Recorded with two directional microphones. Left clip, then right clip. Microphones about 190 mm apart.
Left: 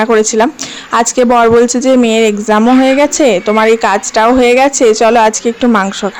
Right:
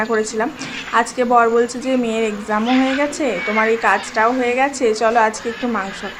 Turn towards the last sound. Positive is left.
turn(degrees=50)  # may be behind; listen again after turning